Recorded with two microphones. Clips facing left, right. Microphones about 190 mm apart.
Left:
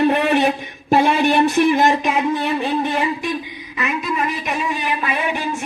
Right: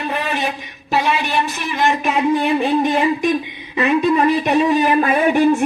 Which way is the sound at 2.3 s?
15° right (ahead or behind).